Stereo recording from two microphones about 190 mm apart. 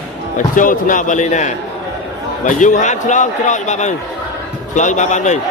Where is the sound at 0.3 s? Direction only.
45° left (ahead or behind).